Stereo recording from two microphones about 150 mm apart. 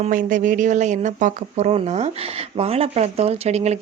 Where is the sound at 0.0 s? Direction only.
60° right (ahead or behind).